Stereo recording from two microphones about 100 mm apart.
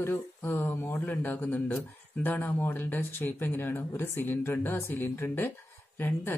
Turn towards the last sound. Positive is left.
turn(degrees=20)  # may be behind; listen again after turning